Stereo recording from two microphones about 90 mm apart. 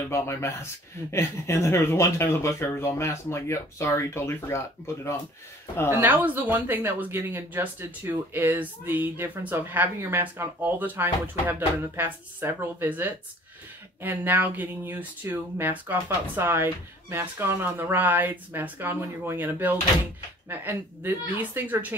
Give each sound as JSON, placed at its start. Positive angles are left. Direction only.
{"t": 0.1, "sound": "speech", "side_deg": 30}
{"t": 5.9, "sound": "speech", "side_deg": -25}